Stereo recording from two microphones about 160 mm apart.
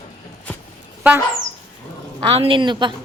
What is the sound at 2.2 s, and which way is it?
Speech, 35° right (ahead or behind).